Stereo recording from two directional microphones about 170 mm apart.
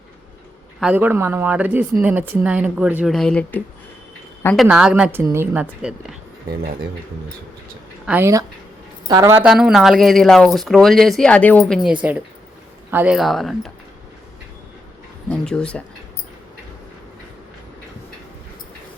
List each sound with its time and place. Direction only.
0.8 s speech: 10° right (ahead or behind)
8.0 s speech: 10° right (ahead or behind)
9.4 s speech: 5° right (ahead or behind)
15.3 s speech: 5° left (ahead or behind)